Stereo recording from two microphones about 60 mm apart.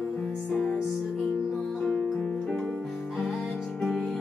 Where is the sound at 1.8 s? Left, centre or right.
Centre.